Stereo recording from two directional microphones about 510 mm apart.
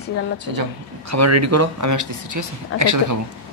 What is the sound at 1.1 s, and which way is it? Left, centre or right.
Speech, right.